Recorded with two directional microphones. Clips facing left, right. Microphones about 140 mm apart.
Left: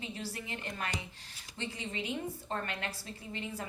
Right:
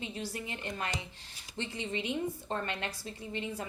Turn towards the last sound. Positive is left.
turn(degrees=-20)  # may be behind; listen again after turning